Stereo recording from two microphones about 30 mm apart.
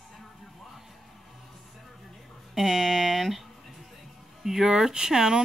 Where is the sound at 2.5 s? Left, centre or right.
Centre.